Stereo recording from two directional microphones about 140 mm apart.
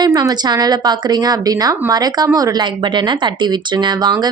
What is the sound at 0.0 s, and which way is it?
A woman's voice, 25° right (ahead or behind).